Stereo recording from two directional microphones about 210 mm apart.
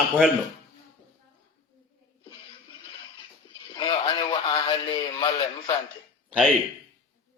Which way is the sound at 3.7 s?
20° left (ahead or behind).